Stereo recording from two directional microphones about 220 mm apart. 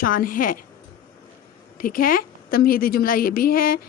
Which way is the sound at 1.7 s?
40° left (ahead or behind).